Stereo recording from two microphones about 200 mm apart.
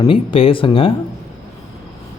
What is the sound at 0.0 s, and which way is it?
Speech, 25° left (ahead or behind).